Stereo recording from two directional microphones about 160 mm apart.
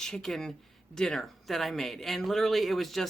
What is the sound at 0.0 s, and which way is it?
Speech, 5° left (ahead or behind).